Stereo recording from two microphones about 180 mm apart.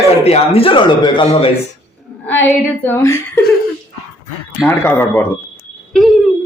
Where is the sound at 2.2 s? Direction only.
10° left (ahead or behind).